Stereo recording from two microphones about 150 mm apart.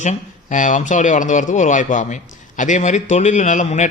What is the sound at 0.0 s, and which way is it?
A man's voice, 55° left (ahead or behind).